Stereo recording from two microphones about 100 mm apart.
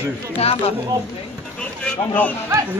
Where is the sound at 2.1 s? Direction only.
15° left (ahead or behind).